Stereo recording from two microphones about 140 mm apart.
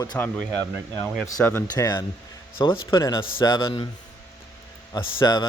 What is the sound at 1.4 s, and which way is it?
Speech, 15° left (ahead or behind).